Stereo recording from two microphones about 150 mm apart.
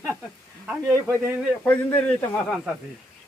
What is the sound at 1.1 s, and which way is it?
Speech, 20° right (ahead or behind).